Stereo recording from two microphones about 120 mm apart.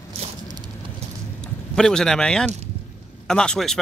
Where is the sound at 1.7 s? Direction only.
5° left (ahead or behind).